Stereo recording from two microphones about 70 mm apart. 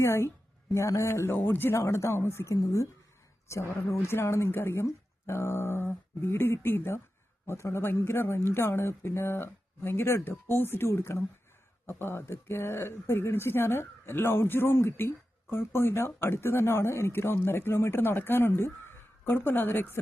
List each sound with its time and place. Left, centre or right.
0.0 s a woman's voice: left
1.7 s a woman's voice: left